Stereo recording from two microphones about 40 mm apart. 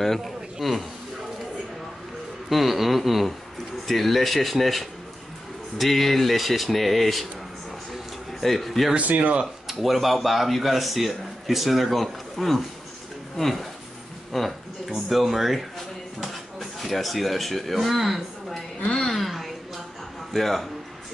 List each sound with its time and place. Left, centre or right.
0.0 s a man's voice: centre
2.5 s speech: centre
8.3 s speech: centre
8.9 s speech: right
9.7 s speech: centre
14.3 s a sound: centre
16.2 s speech: centre
19.0 s a sound: centre
20.3 s speech: centre